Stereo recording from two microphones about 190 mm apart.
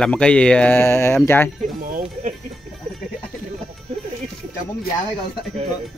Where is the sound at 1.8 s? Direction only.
45° right (ahead or behind).